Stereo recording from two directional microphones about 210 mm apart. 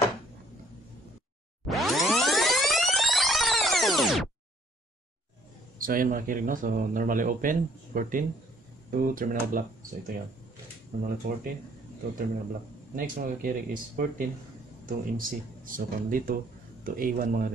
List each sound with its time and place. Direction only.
1.7 s music: centre (ahead or behind)
5.8 s speech: 40° right (ahead or behind)
12.9 s speech: 40° right (ahead or behind)